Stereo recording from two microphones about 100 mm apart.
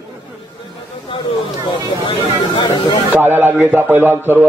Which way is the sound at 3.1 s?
20° right (ahead or behind).